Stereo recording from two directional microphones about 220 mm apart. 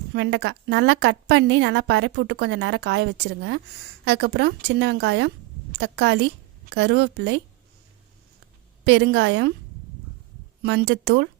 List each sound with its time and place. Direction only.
0.1 s a woman's voice: 50° right (ahead or behind)
8.8 s a woman's voice: 55° right (ahead or behind)
10.6 s a woman's voice: 50° right (ahead or behind)